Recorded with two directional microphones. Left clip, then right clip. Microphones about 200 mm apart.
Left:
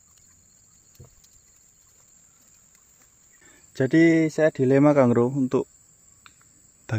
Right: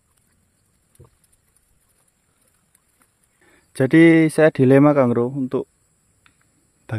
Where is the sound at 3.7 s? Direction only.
35° right (ahead or behind).